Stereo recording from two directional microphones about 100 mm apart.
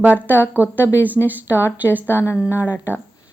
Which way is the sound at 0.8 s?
20° left (ahead or behind).